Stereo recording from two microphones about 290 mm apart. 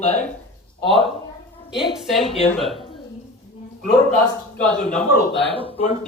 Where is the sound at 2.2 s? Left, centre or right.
Centre.